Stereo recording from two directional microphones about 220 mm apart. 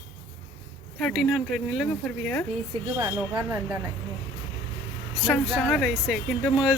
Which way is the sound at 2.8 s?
15° right (ahead or behind).